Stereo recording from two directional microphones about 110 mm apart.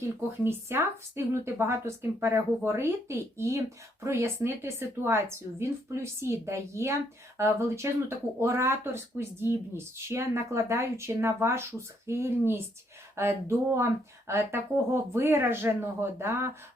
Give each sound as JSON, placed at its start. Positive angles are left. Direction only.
{"t": 0.0, "sound": "speech", "side_deg": -20}